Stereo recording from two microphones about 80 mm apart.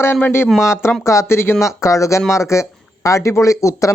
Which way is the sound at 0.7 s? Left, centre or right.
Left.